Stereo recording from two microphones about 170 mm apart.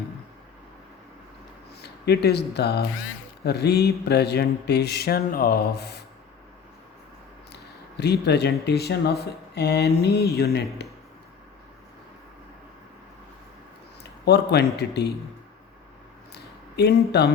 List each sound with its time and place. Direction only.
1.8 s speech: 75° left (ahead or behind)
3.4 s mantra: 75° left (ahead or behind)
7.5 s a sound: 75° left (ahead or behind)
8.6 s mantra: 70° left (ahead or behind)
14.0 s speech: 75° left (ahead or behind)
16.3 s a sound: 75° left (ahead or behind)